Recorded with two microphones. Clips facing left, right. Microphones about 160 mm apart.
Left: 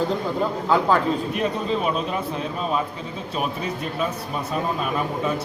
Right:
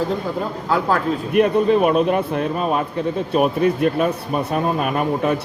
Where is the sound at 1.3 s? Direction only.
60° right (ahead or behind).